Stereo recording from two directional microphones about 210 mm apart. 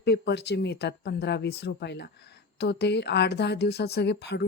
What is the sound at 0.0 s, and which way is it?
Speech, 50° left (ahead or behind).